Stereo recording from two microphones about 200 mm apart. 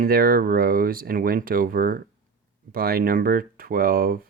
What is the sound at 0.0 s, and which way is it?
Speech, 45° right (ahead or behind).